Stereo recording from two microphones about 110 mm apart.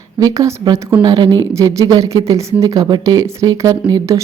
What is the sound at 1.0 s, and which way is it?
Speech, 45° right (ahead or behind).